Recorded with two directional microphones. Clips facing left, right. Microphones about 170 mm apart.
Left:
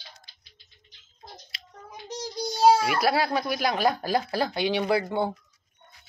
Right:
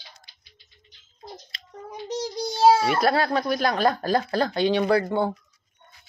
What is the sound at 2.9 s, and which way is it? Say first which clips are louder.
Speech: right 2 dB; 5° left (ahead or behind).